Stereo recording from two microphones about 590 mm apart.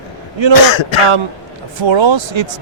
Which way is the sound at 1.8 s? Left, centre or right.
Right.